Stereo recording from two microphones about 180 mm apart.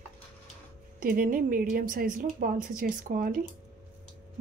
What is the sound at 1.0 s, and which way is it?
Speech, 50° right (ahead or behind).